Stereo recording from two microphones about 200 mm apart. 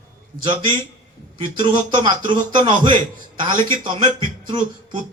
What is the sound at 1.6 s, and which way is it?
Speech, 25° right (ahead or behind).